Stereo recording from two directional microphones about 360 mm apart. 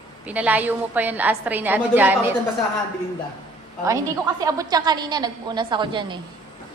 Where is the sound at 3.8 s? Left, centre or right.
Centre.